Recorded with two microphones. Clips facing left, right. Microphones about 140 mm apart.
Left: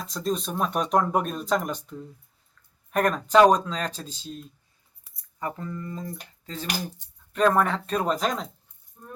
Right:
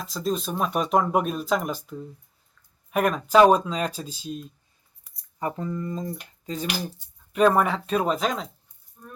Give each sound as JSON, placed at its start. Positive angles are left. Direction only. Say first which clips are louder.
{"t": 0.0, "sound": "speech", "louder": "right 1 dB", "side_deg": 0}